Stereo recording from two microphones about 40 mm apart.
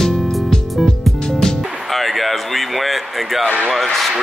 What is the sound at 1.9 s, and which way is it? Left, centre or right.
Speech, centre.